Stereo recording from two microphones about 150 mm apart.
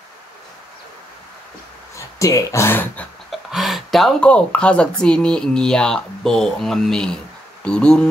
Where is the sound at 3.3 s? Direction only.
Centre (ahead or behind).